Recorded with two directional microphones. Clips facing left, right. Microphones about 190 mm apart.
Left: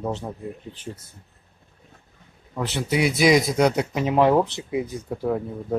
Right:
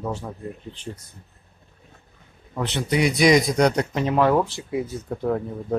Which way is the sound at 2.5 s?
5° left (ahead or behind).